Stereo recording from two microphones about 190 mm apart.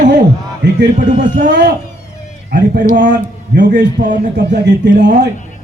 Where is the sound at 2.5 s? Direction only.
45° right (ahead or behind).